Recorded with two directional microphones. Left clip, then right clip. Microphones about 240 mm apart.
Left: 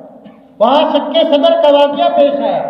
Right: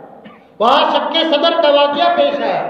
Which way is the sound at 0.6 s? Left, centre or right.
Right.